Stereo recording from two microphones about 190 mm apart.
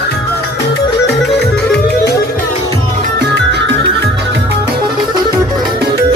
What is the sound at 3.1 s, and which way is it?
Music, 65° right (ahead or behind).